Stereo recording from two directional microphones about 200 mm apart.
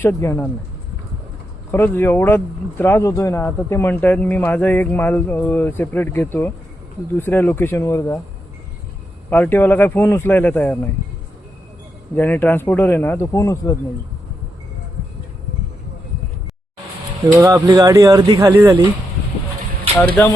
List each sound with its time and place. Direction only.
0.0 s speech: 10° left (ahead or behind)
1.7 s speech: 10° left (ahead or behind)
9.3 s speech: 10° left (ahead or behind)
12.1 s speech: 10° left (ahead or behind)
17.4 s speech: 15° right (ahead or behind)
20.2 s speech: 10° left (ahead or behind)